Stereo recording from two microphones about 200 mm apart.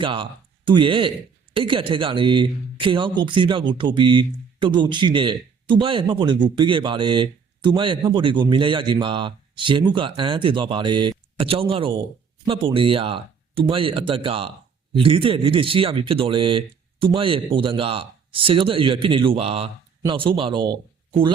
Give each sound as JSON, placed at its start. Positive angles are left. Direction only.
{"t": 0.0, "sound": "a man's voice", "side_deg": -25}